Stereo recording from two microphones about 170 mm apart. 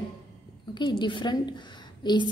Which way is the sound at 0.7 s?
25° left (ahead or behind).